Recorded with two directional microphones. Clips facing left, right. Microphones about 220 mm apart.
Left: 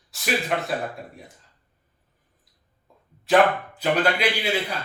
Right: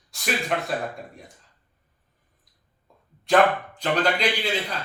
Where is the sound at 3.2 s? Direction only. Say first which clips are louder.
Left 1 dB; 5° left (ahead or behind).